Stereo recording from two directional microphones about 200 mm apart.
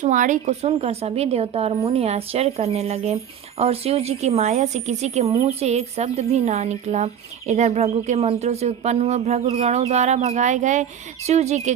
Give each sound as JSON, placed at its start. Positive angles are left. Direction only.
{"t": 0.0, "sound": "a woman's voice", "side_deg": -40}